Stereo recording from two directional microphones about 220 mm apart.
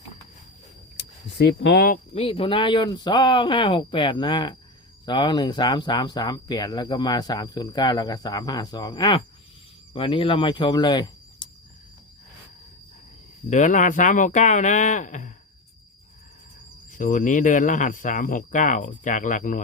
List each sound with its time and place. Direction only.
1.3 s speech: 50° left (ahead or behind)
2.1 s speech: 25° left (ahead or behind)
13.5 s speech: 35° left (ahead or behind)
16.9 s speech: 35° left (ahead or behind)